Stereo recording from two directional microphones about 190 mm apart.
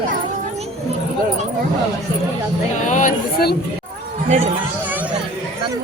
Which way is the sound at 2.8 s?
40° left (ahead or behind).